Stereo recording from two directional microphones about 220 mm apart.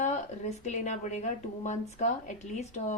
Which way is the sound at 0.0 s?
30° left (ahead or behind).